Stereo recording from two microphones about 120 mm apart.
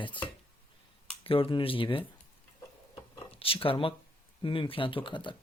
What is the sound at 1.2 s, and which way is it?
Speech, 50° left (ahead or behind).